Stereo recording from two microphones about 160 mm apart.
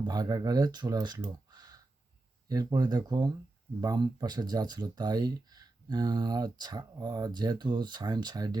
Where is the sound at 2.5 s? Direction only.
20° right (ahead or behind).